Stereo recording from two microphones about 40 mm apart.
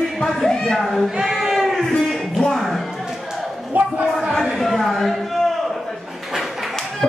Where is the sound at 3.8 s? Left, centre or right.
Right.